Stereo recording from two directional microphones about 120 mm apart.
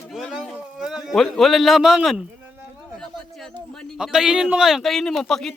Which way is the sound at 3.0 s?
5° left (ahead or behind).